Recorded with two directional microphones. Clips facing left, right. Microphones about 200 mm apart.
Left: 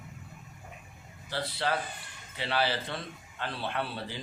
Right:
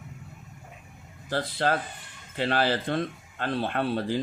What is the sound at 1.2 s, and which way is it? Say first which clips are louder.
Speech: right 5 dB; 50° right (ahead or behind).